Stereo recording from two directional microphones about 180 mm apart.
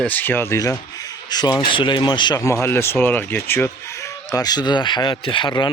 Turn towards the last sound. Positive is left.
turn(degrees=25)  # may be behind; listen again after turning